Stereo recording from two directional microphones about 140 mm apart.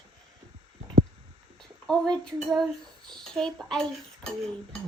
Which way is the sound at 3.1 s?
5° left (ahead or behind).